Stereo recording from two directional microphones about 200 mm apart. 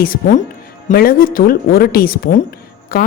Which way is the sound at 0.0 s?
45° left (ahead or behind).